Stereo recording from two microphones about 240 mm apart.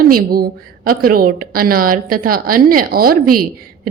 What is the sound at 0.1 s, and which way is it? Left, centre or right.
A woman's voice, right.